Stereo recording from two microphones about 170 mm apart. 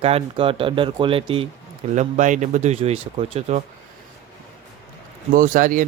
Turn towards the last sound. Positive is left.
turn(degrees=-50)  # may be behind; listen again after turning